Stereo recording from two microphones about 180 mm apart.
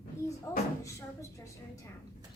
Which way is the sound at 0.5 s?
20° left (ahead or behind).